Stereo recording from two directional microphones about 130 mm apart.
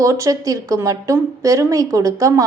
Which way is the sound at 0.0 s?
25° right (ahead or behind).